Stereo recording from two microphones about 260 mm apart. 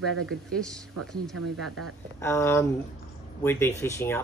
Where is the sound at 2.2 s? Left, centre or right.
Centre.